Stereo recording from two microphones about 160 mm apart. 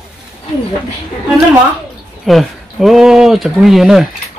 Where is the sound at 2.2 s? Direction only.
Centre (ahead or behind).